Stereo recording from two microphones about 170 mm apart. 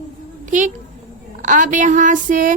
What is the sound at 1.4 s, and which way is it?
Speech, 50° right (ahead or behind).